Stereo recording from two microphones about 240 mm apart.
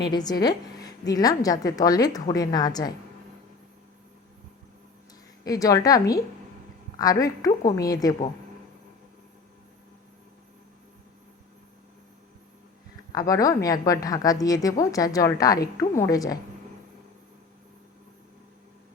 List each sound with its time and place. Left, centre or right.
0.1 s a woman's voice: centre
5.5 s a woman's voice: centre
13.1 s a woman's voice: centre